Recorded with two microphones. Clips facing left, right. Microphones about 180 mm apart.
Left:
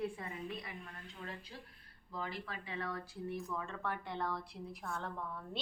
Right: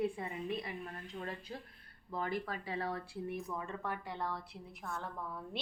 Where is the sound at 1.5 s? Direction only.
50° right (ahead or behind); by 3.0 s 35° right (ahead or behind).